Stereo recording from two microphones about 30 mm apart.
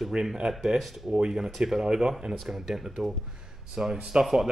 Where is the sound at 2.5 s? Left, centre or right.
Centre.